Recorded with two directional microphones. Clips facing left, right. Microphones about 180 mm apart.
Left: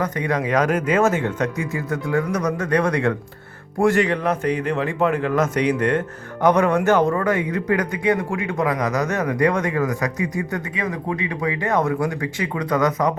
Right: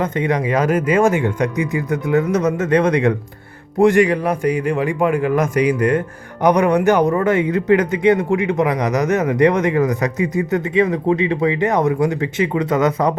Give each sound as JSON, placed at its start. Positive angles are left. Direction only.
{"t": 0.0, "sound": "a man's voice", "side_deg": -25}
{"t": 0.4, "sound": "a man's voice", "side_deg": -10}